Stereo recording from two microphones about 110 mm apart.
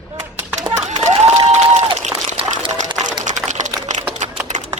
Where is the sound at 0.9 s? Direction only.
80° right.